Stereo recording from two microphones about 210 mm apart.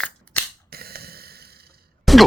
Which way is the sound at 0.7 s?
45° right (ahead or behind).